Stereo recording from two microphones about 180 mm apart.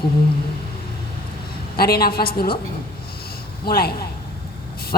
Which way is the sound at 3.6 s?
60° left (ahead or behind).